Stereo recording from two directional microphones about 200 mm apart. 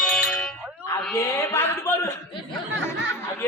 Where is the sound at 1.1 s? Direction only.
10° left (ahead or behind).